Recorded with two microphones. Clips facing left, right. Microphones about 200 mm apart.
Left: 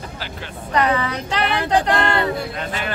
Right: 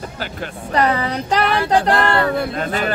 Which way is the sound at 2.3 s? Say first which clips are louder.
Right 5 dB; 55° right (ahead or behind).